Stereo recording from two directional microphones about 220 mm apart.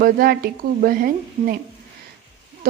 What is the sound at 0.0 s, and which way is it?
A woman's voice, 40° right (ahead or behind).